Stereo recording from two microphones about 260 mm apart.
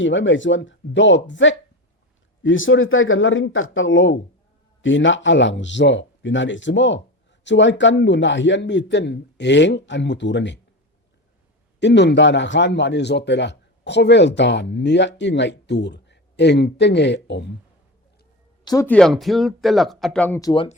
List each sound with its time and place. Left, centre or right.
0.0 s a man's voice: left
11.8 s a man's voice: left
18.6 s speech: centre